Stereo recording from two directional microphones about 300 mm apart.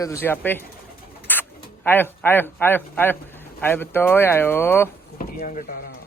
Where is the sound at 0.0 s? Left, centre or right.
Centre.